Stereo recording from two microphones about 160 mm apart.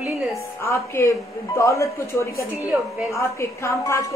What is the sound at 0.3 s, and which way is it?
A woman's voice, 20° left (ahead or behind).